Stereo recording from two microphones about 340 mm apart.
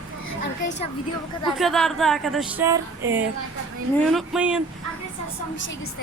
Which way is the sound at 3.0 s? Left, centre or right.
Right.